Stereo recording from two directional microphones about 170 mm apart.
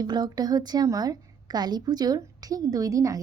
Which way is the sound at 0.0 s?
25° right (ahead or behind).